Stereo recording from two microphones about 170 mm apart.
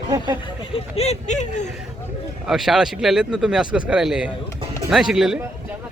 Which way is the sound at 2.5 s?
Centre (ahead or behind).